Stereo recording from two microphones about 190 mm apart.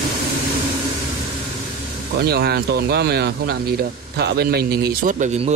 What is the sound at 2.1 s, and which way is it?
Speech, 55° right (ahead or behind).